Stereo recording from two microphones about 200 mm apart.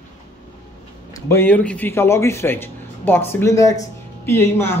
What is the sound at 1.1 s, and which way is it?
A man's voice, 15° left (ahead or behind).